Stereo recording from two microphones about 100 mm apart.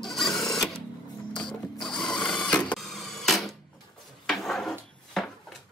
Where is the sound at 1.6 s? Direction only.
5° left (ahead or behind).